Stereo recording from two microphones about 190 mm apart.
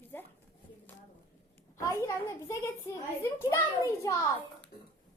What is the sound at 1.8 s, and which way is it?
A child's voice, 15° left (ahead or behind).